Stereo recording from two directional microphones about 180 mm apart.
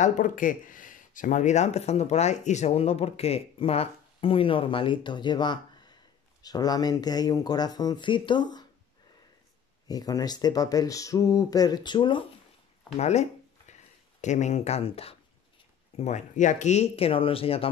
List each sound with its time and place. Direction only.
0.0 s speech: 45° left (ahead or behind); by 8.6 s 25° left (ahead or behind)
9.8 s speech: 20° left (ahead or behind)
12.9 s a sound: 35° left (ahead or behind)
14.2 s speech: 40° left (ahead or behind)